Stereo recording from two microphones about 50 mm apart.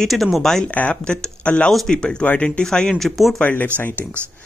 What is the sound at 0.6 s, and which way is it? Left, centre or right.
Speech, left.